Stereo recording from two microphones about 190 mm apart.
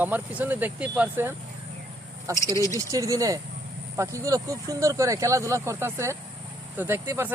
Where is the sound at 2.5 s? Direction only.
15° left (ahead or behind).